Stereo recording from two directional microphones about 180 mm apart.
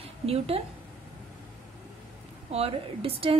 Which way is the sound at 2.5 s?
35° right (ahead or behind).